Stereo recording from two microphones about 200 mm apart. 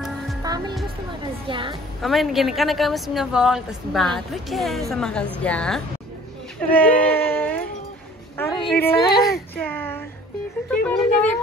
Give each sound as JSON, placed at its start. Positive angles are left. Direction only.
{"t": 0.4, "sound": "music", "side_deg": -20}
{"t": 1.5, "sound": "a woman's voice", "side_deg": -25}
{"t": 2.0, "sound": "a woman's voice", "side_deg": 0}
{"t": 6.7, "sound": "a sound", "side_deg": 10}
{"t": 8.6, "sound": "a woman's voice", "side_deg": 10}
{"t": 9.2, "sound": "a sound", "side_deg": 15}